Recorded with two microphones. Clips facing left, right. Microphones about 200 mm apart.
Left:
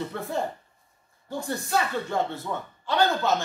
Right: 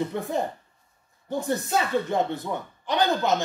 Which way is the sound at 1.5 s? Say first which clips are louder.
Right 2 dB; 20° right (ahead or behind).